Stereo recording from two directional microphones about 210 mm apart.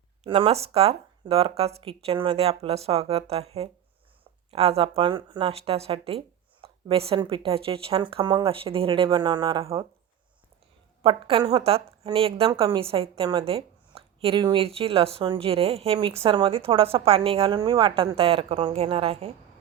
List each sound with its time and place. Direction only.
0.3 s a woman's voice: 25° right (ahead or behind)
11.0 s a woman's voice: 25° right (ahead or behind)